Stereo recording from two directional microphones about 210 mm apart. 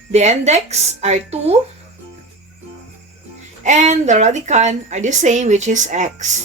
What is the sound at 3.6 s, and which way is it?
A woman's voice, 35° right (ahead or behind).